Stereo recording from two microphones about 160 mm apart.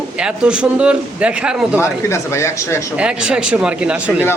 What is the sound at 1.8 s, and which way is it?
Speech, 15° left (ahead or behind).